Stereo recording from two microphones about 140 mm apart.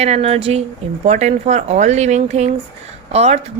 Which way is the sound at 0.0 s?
50° right (ahead or behind).